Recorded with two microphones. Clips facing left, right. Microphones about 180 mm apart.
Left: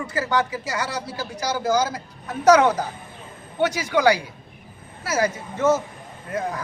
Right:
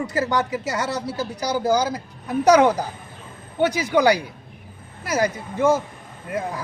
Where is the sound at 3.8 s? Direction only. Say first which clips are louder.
Even; 15° right (ahead or behind).